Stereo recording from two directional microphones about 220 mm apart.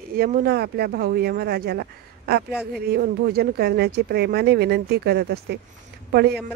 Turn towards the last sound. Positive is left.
turn(degrees=-45)  # may be behind; listen again after turning